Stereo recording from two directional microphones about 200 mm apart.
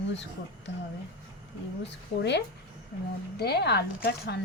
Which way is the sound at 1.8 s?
60° left (ahead or behind).